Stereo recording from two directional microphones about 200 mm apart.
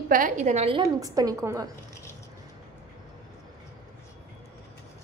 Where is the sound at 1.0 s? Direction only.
15° right (ahead or behind).